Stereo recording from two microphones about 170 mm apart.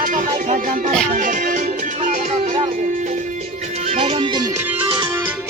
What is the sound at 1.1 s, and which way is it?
Music, 50° right (ahead or behind).